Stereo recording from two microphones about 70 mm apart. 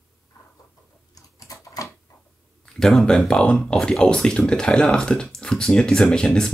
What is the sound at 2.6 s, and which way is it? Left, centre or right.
Speech, centre.